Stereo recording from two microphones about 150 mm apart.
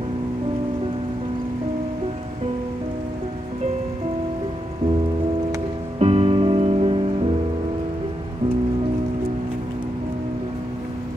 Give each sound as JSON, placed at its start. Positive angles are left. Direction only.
{"t": 5.9, "sound": "music", "side_deg": -45}